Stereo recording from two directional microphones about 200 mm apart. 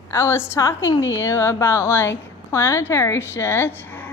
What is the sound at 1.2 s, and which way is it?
A woman's voice, 15° left (ahead or behind).